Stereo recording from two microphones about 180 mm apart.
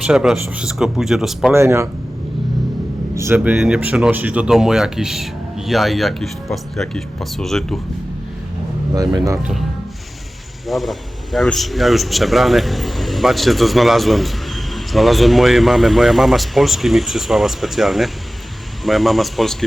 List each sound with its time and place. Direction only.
0.0 s speech: 5° right (ahead or behind)
1.5 s speech: 15° right (ahead or behind)
3.2 s speech: 10° right (ahead or behind)
9.0 s speech: 20° right (ahead or behind)
10.7 s speech: centre (ahead or behind)